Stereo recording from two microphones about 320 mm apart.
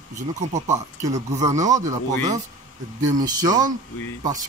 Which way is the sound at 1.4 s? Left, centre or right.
Centre.